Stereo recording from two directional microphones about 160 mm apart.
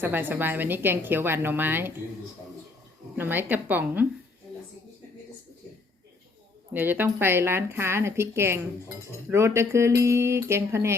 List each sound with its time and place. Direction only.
0.0 s a woman's voice: 10° right (ahead or behind)
3.2 s a woman's voice: 10° right (ahead or behind)
6.7 s a woman's voice: 10° right (ahead or behind)